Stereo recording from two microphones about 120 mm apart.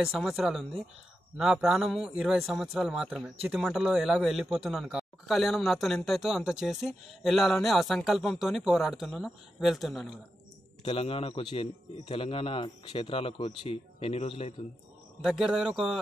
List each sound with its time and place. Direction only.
0.1 s a man's voice: centre (ahead or behind)
10.8 s a man's voice: 55° left (ahead or behind)
15.2 s a man's voice: 5° right (ahead or behind)